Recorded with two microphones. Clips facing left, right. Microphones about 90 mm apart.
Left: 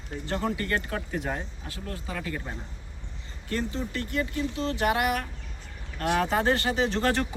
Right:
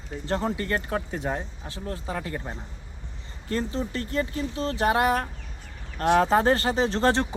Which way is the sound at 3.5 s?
35° right (ahead or behind).